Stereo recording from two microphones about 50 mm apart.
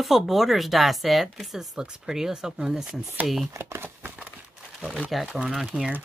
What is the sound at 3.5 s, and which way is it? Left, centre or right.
Speech, right.